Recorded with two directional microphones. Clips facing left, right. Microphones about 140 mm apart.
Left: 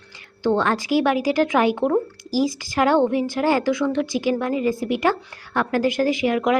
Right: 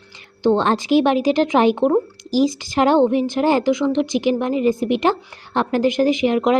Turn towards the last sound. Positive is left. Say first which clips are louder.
# right 3 dB
turn(degrees=-25)  # may be behind; listen again after turning